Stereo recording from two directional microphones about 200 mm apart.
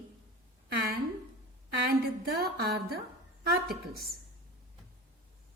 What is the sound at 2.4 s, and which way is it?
Speech, 50° right (ahead or behind).